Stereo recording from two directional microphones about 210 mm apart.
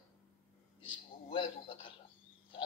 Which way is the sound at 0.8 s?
25° left (ahead or behind).